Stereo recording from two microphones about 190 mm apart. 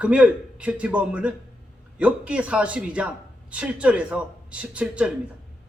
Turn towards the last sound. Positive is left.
turn(degrees=-5)  # may be behind; listen again after turning